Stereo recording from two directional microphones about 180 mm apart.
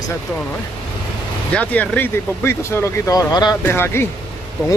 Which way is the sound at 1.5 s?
5° left (ahead or behind).